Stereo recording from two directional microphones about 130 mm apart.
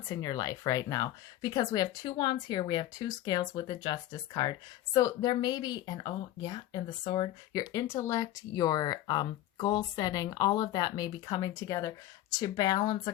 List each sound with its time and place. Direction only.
0.1 s speech: 30° left (ahead or behind)